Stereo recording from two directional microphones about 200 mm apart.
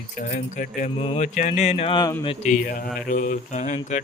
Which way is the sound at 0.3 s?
40° left (ahead or behind).